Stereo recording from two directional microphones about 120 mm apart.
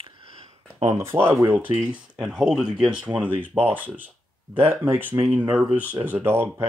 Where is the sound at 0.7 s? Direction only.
25° right (ahead or behind).